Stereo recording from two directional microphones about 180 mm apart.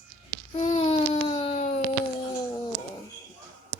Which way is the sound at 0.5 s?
35° left (ahead or behind).